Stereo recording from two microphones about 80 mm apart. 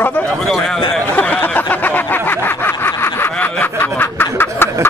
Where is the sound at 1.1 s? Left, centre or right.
Left.